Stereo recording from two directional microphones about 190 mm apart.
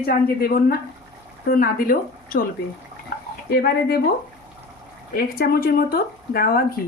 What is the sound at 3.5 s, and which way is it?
Speech, 55° left (ahead or behind).